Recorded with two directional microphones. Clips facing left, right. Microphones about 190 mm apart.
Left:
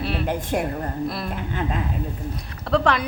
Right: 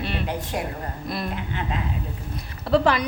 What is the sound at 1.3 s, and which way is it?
Speech, 45° left (ahead or behind).